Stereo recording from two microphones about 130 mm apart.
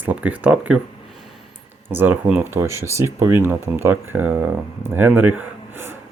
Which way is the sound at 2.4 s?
20° right (ahead or behind).